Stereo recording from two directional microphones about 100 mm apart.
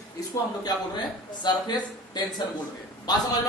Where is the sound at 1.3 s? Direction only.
45° left (ahead or behind).